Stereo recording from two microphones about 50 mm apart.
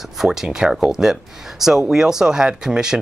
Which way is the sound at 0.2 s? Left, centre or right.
Centre.